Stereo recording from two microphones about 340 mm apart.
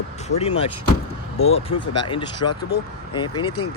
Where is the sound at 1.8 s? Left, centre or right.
Left.